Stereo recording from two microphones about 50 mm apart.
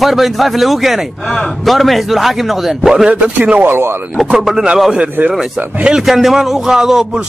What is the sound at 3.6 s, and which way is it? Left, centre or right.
Speech, right.